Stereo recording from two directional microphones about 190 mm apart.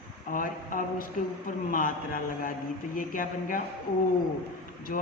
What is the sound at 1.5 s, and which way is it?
A man's voice, 45° left (ahead or behind).